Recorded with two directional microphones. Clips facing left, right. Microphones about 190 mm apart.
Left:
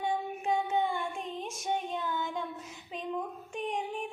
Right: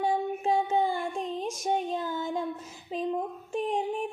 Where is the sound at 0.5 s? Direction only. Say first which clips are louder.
Right 3 dB; 35° right (ahead or behind).